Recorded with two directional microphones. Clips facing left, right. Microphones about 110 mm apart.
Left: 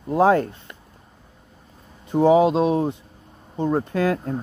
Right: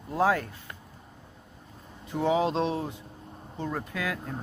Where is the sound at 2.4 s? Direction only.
10° left (ahead or behind).